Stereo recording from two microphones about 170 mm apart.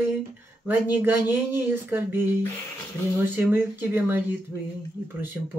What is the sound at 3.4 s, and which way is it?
Speech, 10° right (ahead or behind).